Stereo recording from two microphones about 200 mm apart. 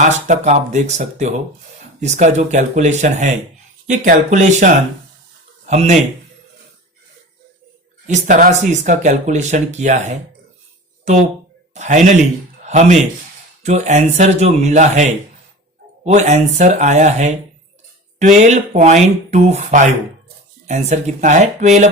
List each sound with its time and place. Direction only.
0.0 s speech: 35° right (ahead or behind)
8.0 s speech: 40° right (ahead or behind)
16.1 s speech: 35° right (ahead or behind)